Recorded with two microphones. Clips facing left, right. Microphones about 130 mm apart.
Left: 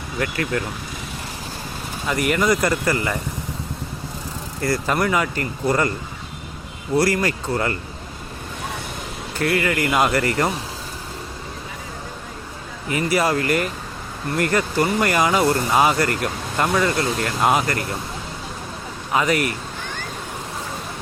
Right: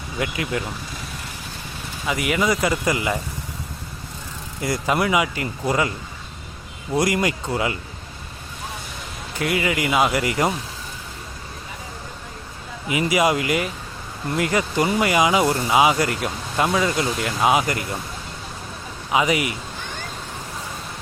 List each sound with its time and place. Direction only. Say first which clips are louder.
0.2 s speech: left 2 dB; 10° right (ahead or behind)
2.0 s speech: left 2 dB; 5° right (ahead or behind)
4.6 s speech: left 1 dB; 10° right (ahead or behind)
6.9 s speech: left 1 dB; 15° right (ahead or behind)
9.4 s speech: left 2 dB; 10° right (ahead or behind)
12.9 s speech: right 1 dB; 10° right (ahead or behind)
19.1 s speech: even; 10° right (ahead or behind)